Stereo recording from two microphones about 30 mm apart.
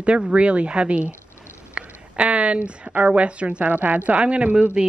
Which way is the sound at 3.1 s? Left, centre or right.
Right.